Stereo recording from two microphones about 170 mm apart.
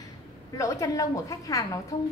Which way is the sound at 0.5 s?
20° left (ahead or behind).